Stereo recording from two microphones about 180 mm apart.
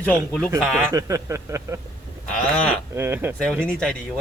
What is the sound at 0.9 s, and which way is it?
Speech, 15° right (ahead or behind).